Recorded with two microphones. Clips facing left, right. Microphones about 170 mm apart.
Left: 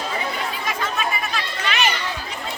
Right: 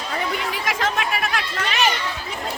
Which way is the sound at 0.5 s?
80° right.